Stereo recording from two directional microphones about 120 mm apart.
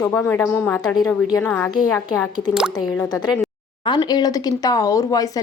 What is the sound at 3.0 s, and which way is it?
Speech, 35° left (ahead or behind).